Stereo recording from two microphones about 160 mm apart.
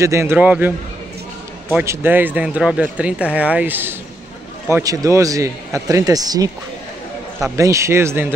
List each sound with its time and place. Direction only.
0.0 s a man's voice: 15° right (ahead or behind)
7.5 s a man's voice: 20° right (ahead or behind)